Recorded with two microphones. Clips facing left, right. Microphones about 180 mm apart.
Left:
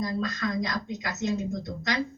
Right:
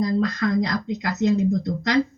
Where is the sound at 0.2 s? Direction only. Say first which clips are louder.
Right 7 dB; 60° right (ahead or behind).